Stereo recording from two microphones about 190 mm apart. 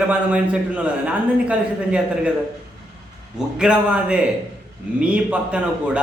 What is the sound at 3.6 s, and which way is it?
A man's voice, 5° right (ahead or behind).